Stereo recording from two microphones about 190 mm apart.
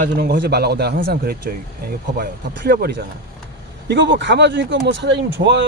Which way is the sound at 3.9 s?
70° right (ahead or behind).